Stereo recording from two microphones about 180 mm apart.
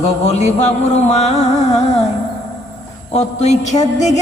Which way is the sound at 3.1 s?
40° left (ahead or behind).